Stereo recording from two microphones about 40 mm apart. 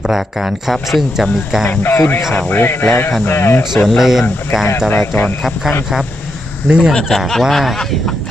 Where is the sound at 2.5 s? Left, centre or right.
Left.